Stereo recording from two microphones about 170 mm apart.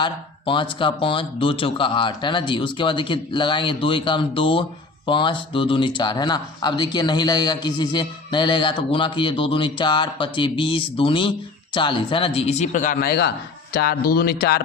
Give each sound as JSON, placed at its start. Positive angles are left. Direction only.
{"t": 0.0, "sound": "speech", "side_deg": 30}
{"t": 13.7, "sound": "speech", "side_deg": 60}